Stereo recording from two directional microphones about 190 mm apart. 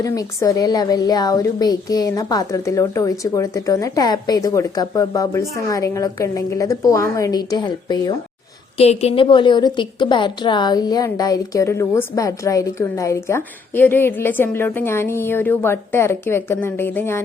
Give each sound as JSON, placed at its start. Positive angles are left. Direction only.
{"t": 0.0, "sound": "a woman's voice", "side_deg": 15}
{"t": 8.8, "sound": "a woman's voice", "side_deg": 35}